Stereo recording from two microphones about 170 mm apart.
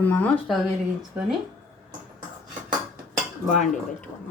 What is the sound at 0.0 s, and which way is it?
Speech, 10° left (ahead or behind).